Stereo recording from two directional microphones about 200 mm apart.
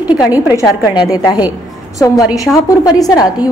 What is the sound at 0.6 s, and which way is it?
A woman's voice, 15° left (ahead or behind).